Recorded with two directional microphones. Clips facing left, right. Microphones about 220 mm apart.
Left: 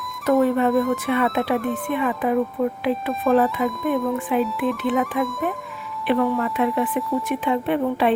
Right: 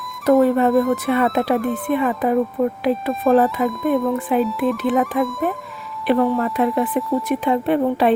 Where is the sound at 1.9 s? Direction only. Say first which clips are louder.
Right 3 dB; 40° right (ahead or behind).